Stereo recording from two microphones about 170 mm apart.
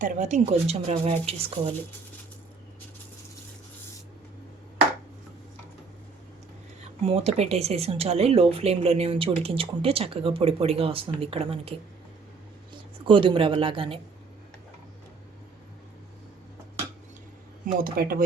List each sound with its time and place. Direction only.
0.0 s speech: 45° right (ahead or behind)
7.0 s speech: 35° right (ahead or behind)
13.1 s speech: 30° right (ahead or behind)
17.7 s speech: 60° right (ahead or behind)